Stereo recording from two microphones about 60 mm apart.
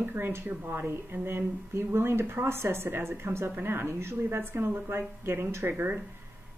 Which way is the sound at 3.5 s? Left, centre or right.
Right.